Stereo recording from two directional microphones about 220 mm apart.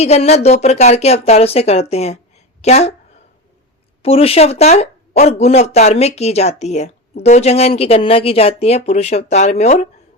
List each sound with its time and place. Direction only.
0.0 s a woman's voice: 30° left (ahead or behind)
4.0 s speech: 25° left (ahead or behind)